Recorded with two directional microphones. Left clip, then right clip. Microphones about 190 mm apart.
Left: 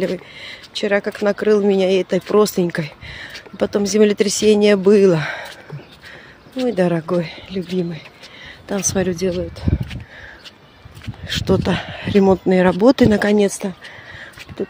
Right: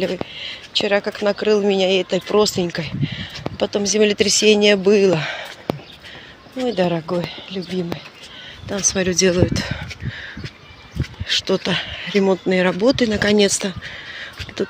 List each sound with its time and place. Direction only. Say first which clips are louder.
0.0 s speech: even; 25° left (ahead or behind)
6.6 s speech: left 1 dB; 30° left (ahead or behind)
9.3 s speech: right 6 dB; 5° right (ahead or behind)
11.2 s speech: even; 30° left (ahead or behind)
13.2 s speech: even; 20° left (ahead or behind)